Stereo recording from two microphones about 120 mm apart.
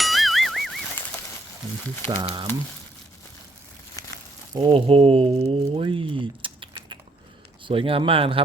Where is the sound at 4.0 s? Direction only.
30° left (ahead or behind).